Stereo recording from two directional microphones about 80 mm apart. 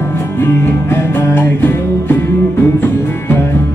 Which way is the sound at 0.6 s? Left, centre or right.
Left.